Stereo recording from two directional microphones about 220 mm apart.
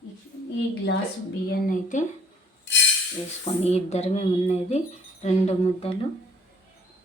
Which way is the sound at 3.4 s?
30° left (ahead or behind).